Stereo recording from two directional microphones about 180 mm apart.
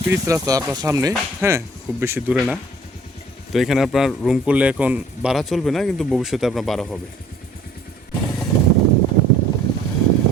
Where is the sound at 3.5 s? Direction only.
Centre (ahead or behind).